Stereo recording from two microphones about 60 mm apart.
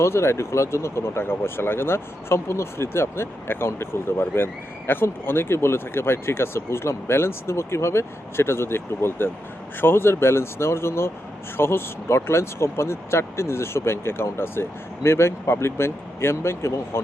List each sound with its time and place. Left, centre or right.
0.0 s speech: left